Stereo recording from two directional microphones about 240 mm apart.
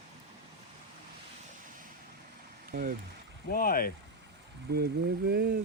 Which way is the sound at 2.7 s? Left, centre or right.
Right.